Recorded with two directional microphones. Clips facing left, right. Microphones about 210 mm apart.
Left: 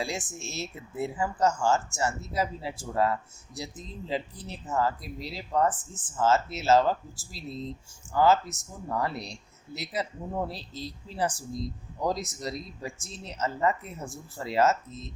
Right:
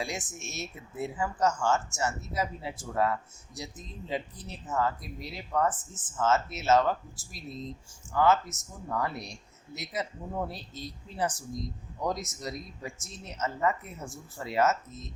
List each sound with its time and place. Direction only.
0.0 s speech: 30° left (ahead or behind)